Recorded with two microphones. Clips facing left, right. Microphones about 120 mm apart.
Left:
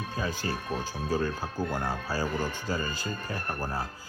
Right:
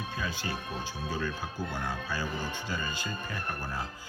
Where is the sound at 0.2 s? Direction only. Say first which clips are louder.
Left 5 dB; 40° left (ahead or behind).